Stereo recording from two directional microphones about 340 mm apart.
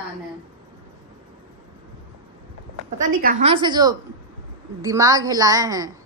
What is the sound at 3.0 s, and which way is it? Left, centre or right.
A woman's voice, right.